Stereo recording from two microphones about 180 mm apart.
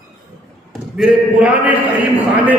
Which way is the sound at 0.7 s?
5° right (ahead or behind).